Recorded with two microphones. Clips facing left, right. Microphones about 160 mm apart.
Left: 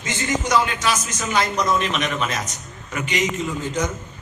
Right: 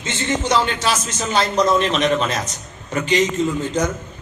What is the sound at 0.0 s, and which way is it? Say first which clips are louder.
A man's voice: right 2 dB; 25° right (ahead or behind).